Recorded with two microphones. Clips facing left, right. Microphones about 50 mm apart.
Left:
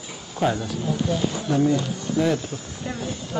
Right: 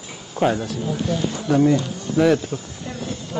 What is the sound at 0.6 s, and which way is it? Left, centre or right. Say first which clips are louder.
Speech: right 1 dB; centre.